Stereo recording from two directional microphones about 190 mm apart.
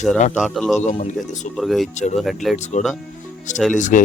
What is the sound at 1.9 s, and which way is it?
Speech, 40° left (ahead or behind).